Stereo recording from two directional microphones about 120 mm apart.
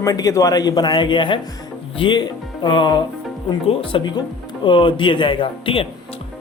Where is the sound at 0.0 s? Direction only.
30° left (ahead or behind).